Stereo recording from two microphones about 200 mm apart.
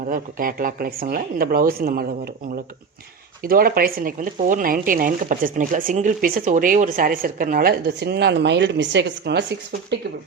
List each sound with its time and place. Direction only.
0.0 s speech: 45° right (ahead or behind)
3.4 s speech: 45° right (ahead or behind)